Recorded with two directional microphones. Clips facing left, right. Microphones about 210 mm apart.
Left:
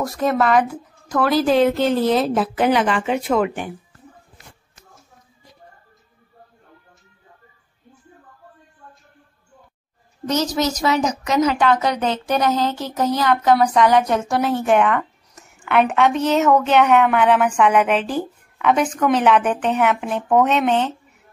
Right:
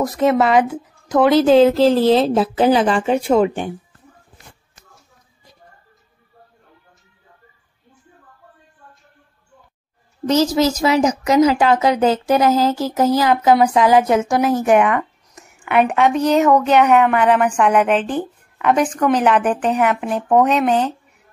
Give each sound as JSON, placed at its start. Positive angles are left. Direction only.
{"t": 0.2, "sound": "a woman's voice", "side_deg": -25}
{"t": 1.0, "sound": "a sound", "side_deg": -20}
{"t": 1.3, "sound": "a woman's voice", "side_deg": 0}
{"t": 1.6, "sound": "a woman's voice", "side_deg": -30}
{"t": 10.5, "sound": "a woman's voice", "side_deg": -25}
{"t": 12.4, "sound": "a sound", "side_deg": -5}
{"t": 13.0, "sound": "a woman's voice", "side_deg": -5}